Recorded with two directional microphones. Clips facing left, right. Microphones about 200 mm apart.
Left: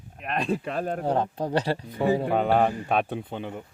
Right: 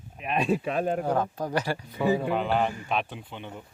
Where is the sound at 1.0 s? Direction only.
30° left (ahead or behind).